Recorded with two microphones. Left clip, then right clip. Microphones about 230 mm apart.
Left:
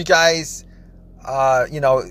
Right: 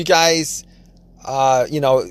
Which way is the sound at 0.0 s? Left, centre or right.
Right.